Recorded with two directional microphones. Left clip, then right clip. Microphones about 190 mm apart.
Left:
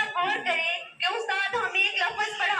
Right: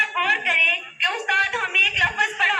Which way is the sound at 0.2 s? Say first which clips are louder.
Right 8 dB; 30° right (ahead or behind).